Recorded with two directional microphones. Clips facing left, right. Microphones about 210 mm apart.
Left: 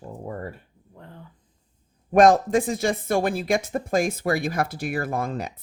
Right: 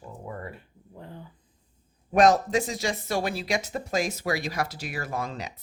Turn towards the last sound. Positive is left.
turn(degrees=55)  # may be behind; listen again after turning